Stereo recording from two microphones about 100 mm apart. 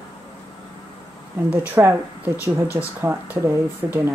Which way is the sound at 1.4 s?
20° right (ahead or behind).